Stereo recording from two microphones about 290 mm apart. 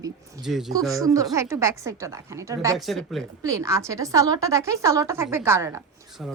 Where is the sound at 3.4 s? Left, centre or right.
Centre.